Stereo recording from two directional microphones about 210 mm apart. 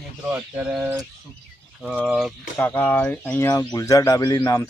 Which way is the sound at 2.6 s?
10° left (ahead or behind).